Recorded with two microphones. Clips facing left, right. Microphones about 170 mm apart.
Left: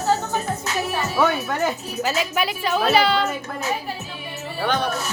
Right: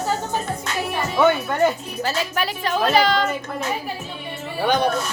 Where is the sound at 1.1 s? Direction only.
5° left (ahead or behind).